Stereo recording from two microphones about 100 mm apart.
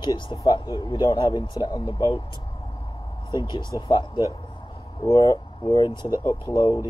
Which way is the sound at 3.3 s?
50° left (ahead or behind).